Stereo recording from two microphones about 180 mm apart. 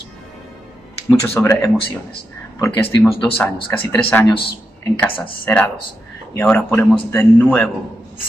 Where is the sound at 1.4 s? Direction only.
10° left (ahead or behind).